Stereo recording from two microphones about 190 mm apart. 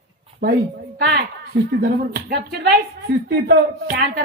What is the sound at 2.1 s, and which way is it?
Speech, 55° right (ahead or behind).